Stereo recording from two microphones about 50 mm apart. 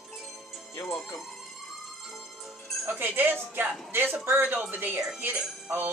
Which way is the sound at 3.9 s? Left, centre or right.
Right.